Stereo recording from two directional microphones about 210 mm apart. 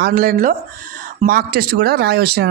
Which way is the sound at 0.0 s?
45° right (ahead or behind).